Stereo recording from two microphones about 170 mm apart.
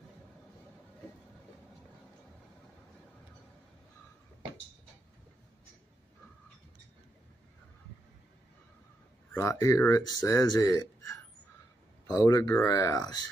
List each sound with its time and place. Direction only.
9.3 s speech: 20° left (ahead or behind)